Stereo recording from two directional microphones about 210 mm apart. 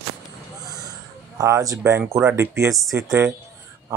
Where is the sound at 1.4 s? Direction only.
15° right (ahead or behind).